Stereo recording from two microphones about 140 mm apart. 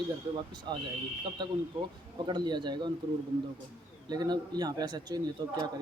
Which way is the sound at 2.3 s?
30° right (ahead or behind).